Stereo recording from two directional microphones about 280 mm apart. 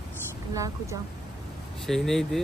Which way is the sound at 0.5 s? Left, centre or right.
Centre.